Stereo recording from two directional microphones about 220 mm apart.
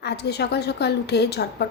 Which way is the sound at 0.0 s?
50° left (ahead or behind).